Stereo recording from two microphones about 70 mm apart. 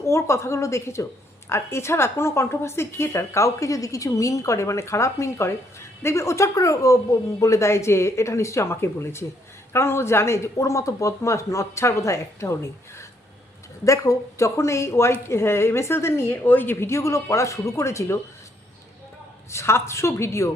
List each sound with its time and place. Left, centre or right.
0.0 s a woman's voice: left
13.8 s a woman's voice: left
19.5 s a woman's voice: left